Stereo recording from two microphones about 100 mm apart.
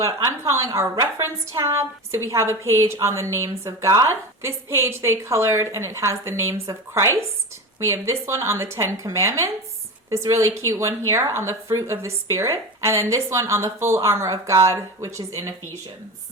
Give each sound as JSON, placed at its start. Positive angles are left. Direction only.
{"t": 0.0, "sound": "a woman's voice", "side_deg": -30}